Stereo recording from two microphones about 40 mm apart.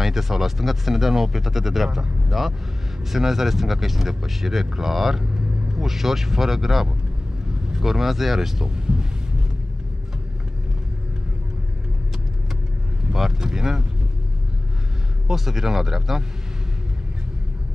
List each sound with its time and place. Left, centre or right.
0.0 s speech: centre
5.2 s vehicle: right
5.9 s speech: centre
8.6 s a sound: right
13.1 s speech: centre
15.2 s speech: centre